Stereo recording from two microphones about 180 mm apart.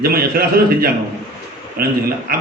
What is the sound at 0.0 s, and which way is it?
Speech, 55° right (ahead or behind).